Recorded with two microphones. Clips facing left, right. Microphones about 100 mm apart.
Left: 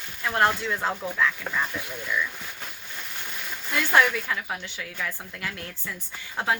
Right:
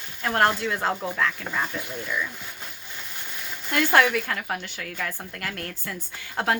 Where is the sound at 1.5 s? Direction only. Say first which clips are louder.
Right 1 dB; 20° right (ahead or behind).